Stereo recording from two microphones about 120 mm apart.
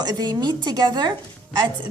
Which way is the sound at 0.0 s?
35° right (ahead or behind).